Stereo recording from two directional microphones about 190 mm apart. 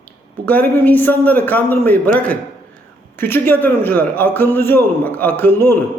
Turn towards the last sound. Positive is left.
turn(degrees=10)  # may be behind; listen again after turning